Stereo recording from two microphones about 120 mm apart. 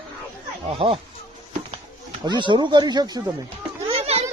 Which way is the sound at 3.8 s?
60° right (ahead or behind).